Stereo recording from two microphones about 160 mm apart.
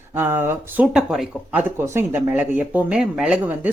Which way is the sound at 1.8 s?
15° right (ahead or behind).